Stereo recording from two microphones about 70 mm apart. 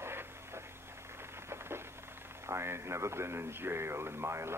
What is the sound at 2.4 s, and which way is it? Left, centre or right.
A man's voice, right.